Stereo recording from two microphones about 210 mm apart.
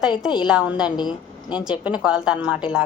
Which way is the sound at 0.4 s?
5° right (ahead or behind).